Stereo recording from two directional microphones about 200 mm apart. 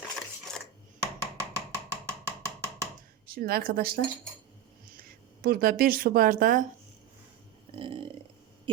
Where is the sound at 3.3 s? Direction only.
50° right (ahead or behind).